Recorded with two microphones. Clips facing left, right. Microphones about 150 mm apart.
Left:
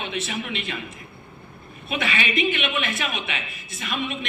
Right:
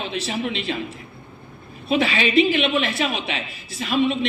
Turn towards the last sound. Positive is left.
turn(degrees=-30)  # may be behind; listen again after turning